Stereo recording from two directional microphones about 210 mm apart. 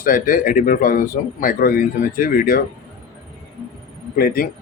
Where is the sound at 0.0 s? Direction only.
40° left (ahead or behind).